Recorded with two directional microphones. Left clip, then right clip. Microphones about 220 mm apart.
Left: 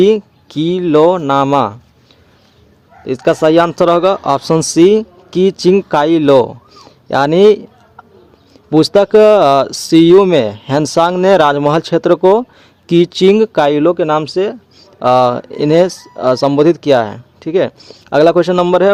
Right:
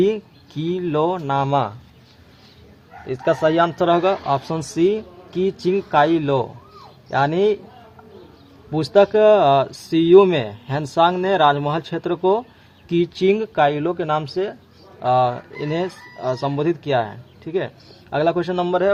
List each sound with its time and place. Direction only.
0.0 s speech: 50° left (ahead or behind)
3.1 s speech: 50° left (ahead or behind)
8.7 s speech: 55° left (ahead or behind)